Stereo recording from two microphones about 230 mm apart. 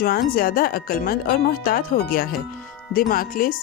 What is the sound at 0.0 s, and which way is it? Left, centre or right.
Speech, left.